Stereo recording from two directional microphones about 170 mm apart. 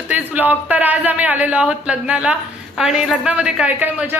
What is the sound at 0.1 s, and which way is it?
A man's voice, 10° right (ahead or behind).